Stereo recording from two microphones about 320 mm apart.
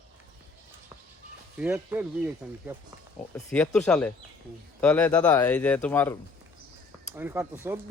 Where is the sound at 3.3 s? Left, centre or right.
Centre.